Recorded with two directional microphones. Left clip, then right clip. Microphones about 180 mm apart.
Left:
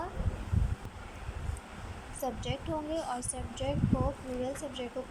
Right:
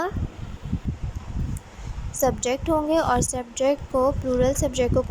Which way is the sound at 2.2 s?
45° right (ahead or behind).